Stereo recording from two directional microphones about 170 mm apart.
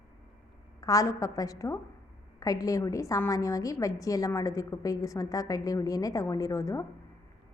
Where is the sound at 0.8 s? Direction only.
20° left (ahead or behind).